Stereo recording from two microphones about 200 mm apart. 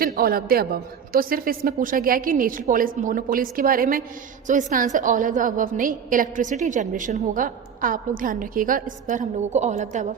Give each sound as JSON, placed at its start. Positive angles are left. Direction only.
{"t": 0.0, "sound": "a woman's voice", "side_deg": -45}